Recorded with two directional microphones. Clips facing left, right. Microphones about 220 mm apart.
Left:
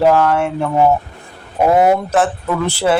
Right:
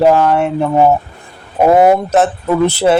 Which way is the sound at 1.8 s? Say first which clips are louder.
Right 3 dB; 20° right (ahead or behind).